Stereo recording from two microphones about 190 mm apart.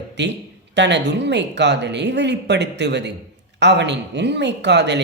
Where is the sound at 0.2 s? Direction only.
65° right (ahead or behind).